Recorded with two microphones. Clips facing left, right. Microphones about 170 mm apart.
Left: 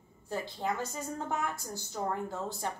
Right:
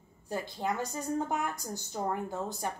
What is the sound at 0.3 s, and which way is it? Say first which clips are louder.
A woman's voice: right 1 dB; 15° right (ahead or behind).